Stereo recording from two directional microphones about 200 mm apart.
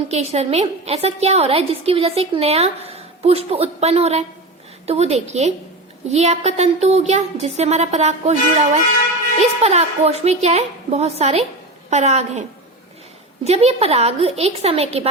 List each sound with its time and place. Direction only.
0.1 s a woman's voice: 30° right (ahead or behind)